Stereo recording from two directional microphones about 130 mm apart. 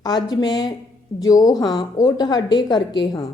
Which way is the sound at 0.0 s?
30° left (ahead or behind).